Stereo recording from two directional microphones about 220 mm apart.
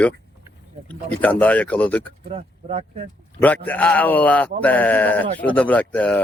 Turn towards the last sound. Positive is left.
turn(degrees=5)  # may be behind; listen again after turning